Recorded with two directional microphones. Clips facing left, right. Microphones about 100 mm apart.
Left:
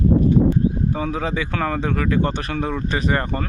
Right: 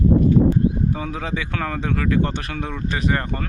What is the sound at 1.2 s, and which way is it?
Speech, 5° left (ahead or behind).